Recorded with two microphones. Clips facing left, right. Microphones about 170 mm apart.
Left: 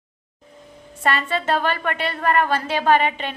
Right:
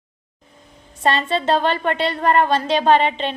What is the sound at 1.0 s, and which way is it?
A woman's voice, 25° right (ahead or behind).